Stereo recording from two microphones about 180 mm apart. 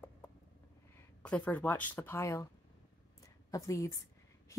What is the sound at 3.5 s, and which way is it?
Speech, 20° left (ahead or behind).